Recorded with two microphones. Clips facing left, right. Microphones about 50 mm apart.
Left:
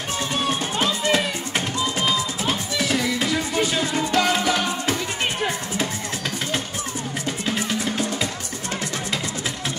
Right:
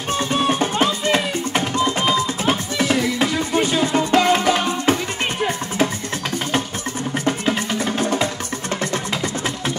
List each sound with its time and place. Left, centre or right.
0.1 s music: right
7.4 s music: right